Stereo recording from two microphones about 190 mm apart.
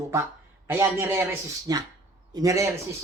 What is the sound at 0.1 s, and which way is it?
Speech, 15° right (ahead or behind).